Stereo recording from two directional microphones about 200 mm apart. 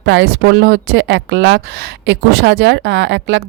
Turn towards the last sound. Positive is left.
turn(degrees=-60)  # may be behind; listen again after turning